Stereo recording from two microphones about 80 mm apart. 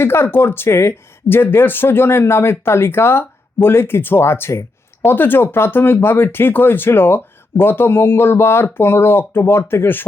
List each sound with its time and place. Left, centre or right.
0.0 s speech: left